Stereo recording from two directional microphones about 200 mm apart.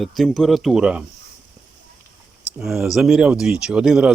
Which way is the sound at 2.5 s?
Centre (ahead or behind).